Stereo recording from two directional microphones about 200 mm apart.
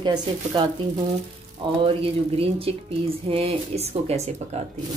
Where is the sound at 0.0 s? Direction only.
20° right (ahead or behind).